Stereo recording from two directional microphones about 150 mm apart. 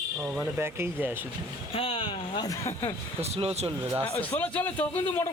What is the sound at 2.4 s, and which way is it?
Speech, 20° left (ahead or behind).